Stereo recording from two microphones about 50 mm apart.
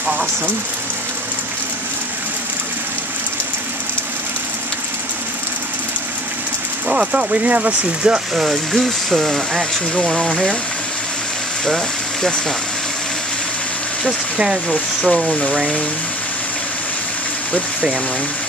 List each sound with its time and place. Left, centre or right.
6.9 s speech: centre
8.0 s speech: centre
8.5 s speech: centre
11.6 s speech: centre
15.0 s speech: centre